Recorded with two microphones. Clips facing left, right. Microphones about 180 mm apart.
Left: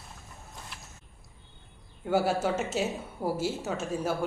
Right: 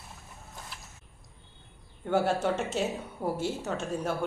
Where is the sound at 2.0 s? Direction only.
5° left (ahead or behind).